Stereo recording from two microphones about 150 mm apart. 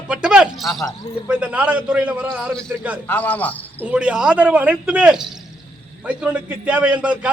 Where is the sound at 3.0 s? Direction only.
10° left (ahead or behind).